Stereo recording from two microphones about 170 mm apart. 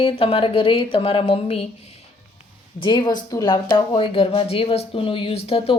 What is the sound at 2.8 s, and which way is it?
A woman's voice, 25° left (ahead or behind).